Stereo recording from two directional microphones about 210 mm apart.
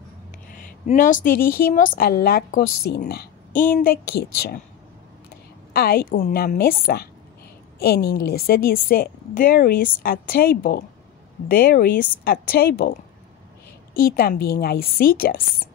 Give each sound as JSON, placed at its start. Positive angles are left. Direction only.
{"t": 0.5, "sound": "a woman's voice", "side_deg": 40}
{"t": 5.7, "sound": "a woman's voice", "side_deg": 45}
{"t": 13.9, "sound": "a woman's voice", "side_deg": 45}